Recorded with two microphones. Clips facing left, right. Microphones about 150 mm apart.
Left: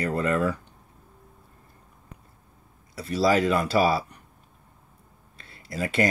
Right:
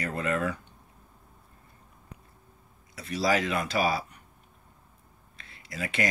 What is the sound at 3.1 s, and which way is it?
Speech, 30° left (ahead or behind).